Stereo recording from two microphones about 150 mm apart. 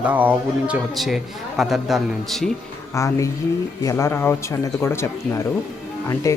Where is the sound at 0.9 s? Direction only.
Centre (ahead or behind).